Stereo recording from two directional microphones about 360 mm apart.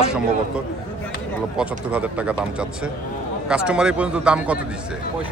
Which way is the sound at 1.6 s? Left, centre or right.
Centre.